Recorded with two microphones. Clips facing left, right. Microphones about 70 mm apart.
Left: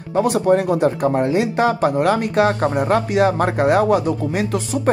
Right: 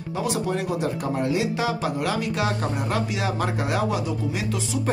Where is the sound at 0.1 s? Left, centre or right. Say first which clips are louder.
Left 10 dB; left.